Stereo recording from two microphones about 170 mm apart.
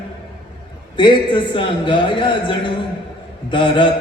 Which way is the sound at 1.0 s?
30° left (ahead or behind).